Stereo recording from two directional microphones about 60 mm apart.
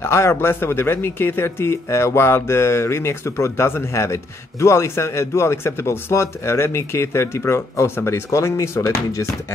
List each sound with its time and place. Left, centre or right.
0.0 s speech: left